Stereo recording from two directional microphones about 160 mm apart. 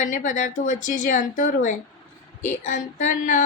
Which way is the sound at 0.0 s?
55° left (ahead or behind).